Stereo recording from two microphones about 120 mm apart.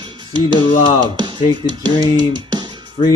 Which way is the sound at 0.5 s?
40° left (ahead or behind).